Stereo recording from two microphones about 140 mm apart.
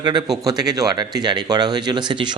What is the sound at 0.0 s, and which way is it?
Speech, 30° right (ahead or behind).